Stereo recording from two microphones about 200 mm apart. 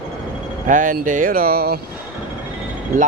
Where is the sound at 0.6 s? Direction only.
40° right (ahead or behind).